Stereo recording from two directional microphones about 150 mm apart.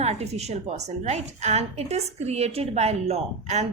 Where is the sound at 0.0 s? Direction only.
45° right (ahead or behind).